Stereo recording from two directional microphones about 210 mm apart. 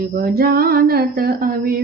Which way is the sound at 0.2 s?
45° right (ahead or behind).